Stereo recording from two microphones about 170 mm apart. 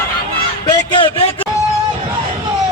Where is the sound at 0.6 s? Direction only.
25° left (ahead or behind).